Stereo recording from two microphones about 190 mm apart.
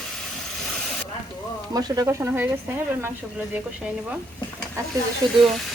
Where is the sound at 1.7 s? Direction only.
15° right (ahead or behind).